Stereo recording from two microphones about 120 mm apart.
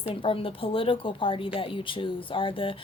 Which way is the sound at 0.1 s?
50° left (ahead or behind).